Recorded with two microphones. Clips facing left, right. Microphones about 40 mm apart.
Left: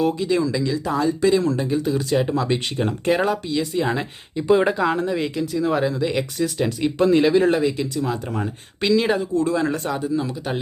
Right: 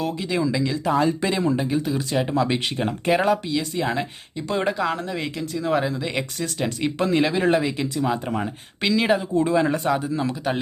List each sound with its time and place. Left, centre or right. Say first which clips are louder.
0.2 s speech: left 2 dB; centre
8.3 s speech: even; centre
9.3 s speech: right 1 dB; right
9.7 s speech: right 2 dB; centre